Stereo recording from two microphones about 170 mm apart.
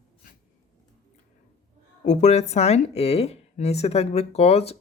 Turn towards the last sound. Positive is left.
turn(degrees=35)  # may be behind; listen again after turning